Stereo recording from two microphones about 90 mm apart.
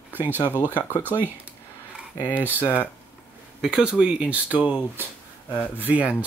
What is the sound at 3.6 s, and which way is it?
Speech, 5° right (ahead or behind).